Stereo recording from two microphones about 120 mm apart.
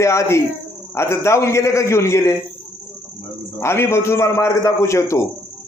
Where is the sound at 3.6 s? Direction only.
20° left (ahead or behind).